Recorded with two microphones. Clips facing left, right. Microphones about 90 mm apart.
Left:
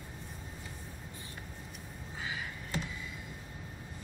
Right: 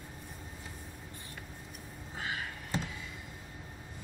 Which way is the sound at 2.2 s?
65° right (ahead or behind).